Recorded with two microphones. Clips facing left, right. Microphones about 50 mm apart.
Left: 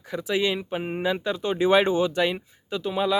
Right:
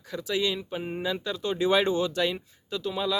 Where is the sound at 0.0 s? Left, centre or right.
Left.